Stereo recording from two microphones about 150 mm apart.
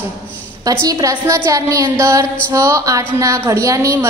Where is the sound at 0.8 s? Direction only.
20° right (ahead or behind).